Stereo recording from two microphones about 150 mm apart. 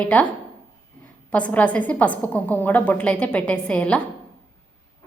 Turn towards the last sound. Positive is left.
turn(degrees=5)  # may be behind; listen again after turning